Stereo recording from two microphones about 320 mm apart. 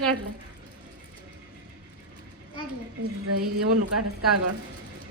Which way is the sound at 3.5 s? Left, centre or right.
Right.